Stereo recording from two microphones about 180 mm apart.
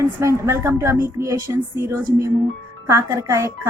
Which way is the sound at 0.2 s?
15° right (ahead or behind).